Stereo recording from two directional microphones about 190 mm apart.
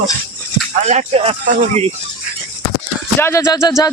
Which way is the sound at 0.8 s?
35° right (ahead or behind).